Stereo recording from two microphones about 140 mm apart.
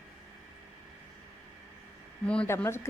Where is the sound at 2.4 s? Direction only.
20° left (ahead or behind).